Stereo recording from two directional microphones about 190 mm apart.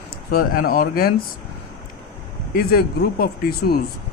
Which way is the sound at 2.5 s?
50° left (ahead or behind).